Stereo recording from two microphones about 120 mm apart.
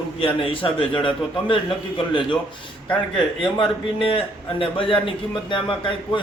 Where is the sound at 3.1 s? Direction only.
45° left (ahead or behind).